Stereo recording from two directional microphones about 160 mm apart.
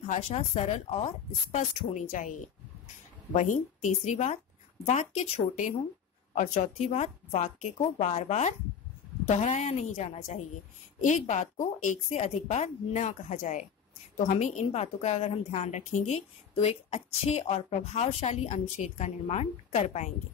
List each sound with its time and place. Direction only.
0.0 s a woman's voice: 40° left (ahead or behind)
3.3 s a woman's voice: 50° left (ahead or behind)